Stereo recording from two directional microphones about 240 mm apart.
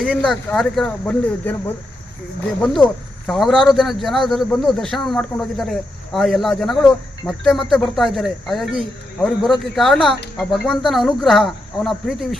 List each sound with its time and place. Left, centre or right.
0.0 s speech: centre